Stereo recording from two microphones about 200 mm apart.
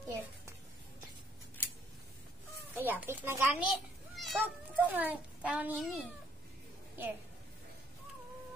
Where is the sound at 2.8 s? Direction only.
10° right (ahead or behind).